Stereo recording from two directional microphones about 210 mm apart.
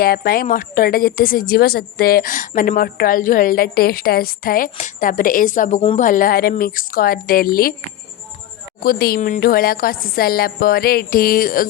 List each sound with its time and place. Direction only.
0.0 s a woman's voice: 45° left (ahead or behind)
8.8 s a woman's voice: 45° left (ahead or behind)